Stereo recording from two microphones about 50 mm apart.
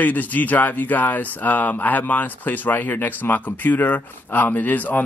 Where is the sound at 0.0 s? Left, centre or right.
Left.